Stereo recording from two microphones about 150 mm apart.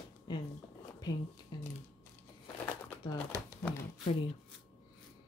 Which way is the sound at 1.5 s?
30° left (ahead or behind).